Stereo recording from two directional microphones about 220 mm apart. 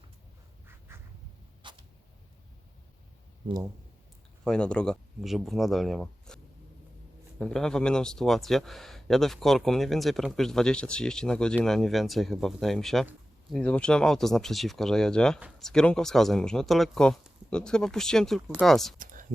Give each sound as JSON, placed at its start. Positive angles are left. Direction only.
{"t": 0.7, "sound": "duck", "side_deg": -10}
{"t": 1.6, "sound": "a sound", "side_deg": -20}
{"t": 3.4, "sound": "speech", "side_deg": -20}
{"t": 4.4, "sound": "speech", "side_deg": 5}